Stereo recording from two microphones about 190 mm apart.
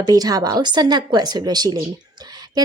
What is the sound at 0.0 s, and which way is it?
Speech, 20° right (ahead or behind).